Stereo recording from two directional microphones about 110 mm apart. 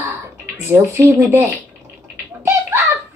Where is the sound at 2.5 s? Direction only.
25° right (ahead or behind).